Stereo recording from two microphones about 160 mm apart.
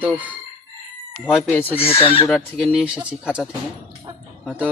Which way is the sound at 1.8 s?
35° left (ahead or behind).